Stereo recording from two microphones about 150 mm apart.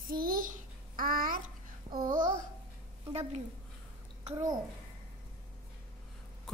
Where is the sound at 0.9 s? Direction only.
70° right (ahead or behind).